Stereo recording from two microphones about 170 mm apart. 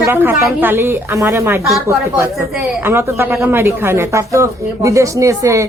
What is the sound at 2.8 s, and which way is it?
A woman's voice, 15° right (ahead or behind).